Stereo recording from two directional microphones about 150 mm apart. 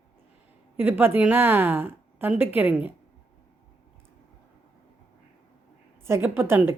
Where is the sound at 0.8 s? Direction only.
15° right (ahead or behind).